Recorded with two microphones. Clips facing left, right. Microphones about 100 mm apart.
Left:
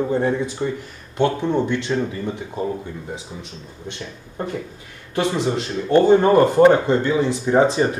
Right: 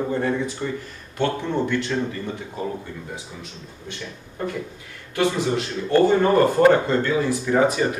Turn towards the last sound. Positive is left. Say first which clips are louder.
# left 3 dB
turn(degrees=30)  # may be behind; listen again after turning